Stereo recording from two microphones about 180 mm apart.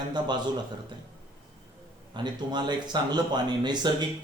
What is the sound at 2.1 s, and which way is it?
Speech, 25° right (ahead or behind).